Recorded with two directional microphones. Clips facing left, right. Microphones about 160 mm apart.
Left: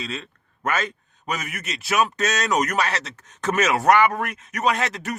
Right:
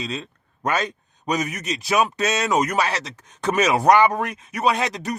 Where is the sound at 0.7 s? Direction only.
35° right (ahead or behind).